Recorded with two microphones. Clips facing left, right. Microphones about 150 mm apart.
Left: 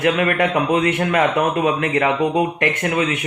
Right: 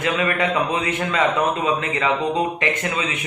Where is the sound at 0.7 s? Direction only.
65° left (ahead or behind).